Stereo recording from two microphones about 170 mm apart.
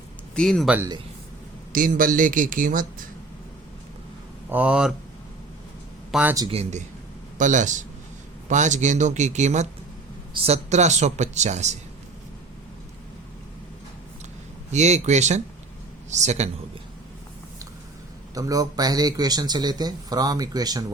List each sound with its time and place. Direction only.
0.3 s speech: 5° left (ahead or behind)
1.7 s speech: 55° right (ahead or behind)
4.4 s speech: 10° right (ahead or behind)
6.1 s speech: 5° right (ahead or behind)
6.5 s speech: 40° right (ahead or behind)
14.7 s speech: 40° right (ahead or behind)
18.3 s speech: 20° right (ahead or behind)